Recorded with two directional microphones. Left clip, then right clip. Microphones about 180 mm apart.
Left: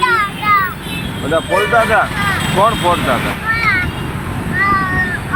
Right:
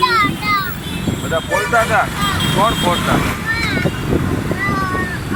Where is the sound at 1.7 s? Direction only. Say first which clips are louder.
Left 2 dB; 30° left (ahead or behind).